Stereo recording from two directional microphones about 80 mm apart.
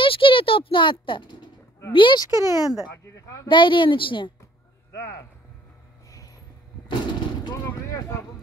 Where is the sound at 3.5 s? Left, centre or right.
Left.